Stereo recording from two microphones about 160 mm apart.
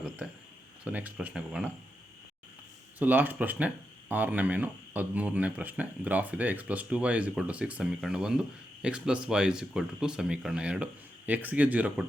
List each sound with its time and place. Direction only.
0.9 s speech: 10° right (ahead or behind)
3.0 s speech: 10° right (ahead or behind)